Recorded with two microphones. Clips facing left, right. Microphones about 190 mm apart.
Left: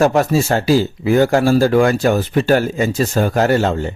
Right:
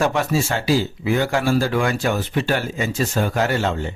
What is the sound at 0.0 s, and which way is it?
Speech, 40° left (ahead or behind).